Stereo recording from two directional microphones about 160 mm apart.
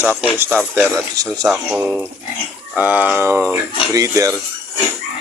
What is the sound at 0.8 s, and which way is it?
Speech, 20° right (ahead or behind).